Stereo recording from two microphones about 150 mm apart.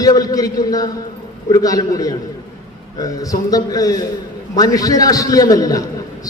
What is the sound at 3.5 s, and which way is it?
A man's voice, 25° left (ahead or behind).